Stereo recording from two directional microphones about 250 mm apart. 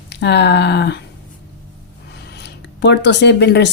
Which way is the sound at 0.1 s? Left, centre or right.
Left.